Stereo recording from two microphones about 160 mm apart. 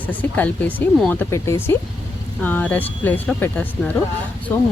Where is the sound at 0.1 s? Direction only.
10° left (ahead or behind).